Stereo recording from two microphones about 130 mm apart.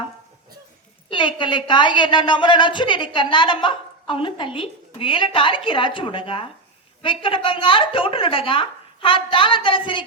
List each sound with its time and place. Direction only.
1.1 s a woman's voice: 40° left (ahead or behind)